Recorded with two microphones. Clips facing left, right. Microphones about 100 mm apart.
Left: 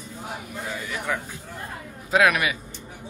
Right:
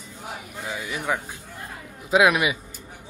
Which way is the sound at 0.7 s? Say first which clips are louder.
Right 2 dB; 15° right (ahead or behind).